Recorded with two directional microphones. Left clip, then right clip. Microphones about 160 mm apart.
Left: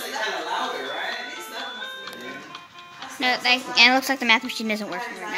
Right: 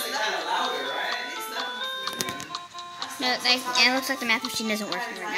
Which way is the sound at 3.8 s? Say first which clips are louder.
Left 5 dB; 30° left (ahead or behind).